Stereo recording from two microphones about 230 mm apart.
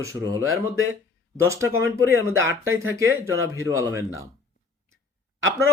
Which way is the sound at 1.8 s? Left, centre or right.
Right.